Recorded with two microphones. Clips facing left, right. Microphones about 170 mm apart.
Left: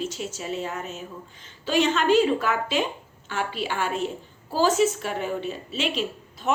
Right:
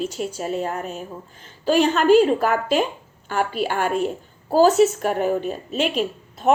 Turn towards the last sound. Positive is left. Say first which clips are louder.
# right 7 dB
turn(degrees=-50)  # may be behind; listen again after turning